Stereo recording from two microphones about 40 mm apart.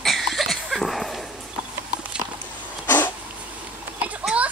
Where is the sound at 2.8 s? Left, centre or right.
Left.